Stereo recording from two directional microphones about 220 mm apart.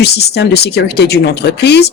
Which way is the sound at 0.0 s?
50° left (ahead or behind).